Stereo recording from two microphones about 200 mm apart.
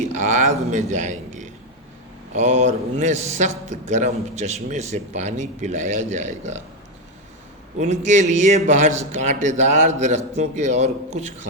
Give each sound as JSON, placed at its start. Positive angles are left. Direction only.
{"t": 0.0, "sound": "a sound", "side_deg": -35}
{"t": 0.6, "sound": "a man's voice", "side_deg": -35}
{"t": 7.8, "sound": "a man's voice", "side_deg": -35}